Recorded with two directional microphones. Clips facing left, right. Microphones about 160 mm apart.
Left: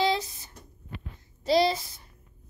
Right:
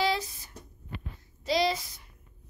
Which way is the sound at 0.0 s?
25° left (ahead or behind).